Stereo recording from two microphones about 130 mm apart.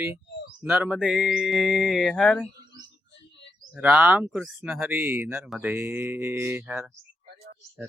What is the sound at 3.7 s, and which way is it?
Speech, 10° right (ahead or behind).